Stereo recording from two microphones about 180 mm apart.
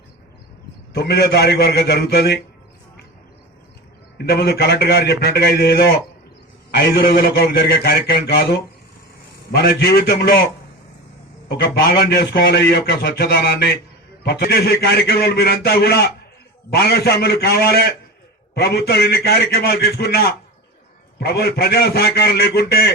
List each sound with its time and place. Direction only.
0.9 s a man's voice: 65° left (ahead or behind)
4.2 s a man's voice: 60° left (ahead or behind)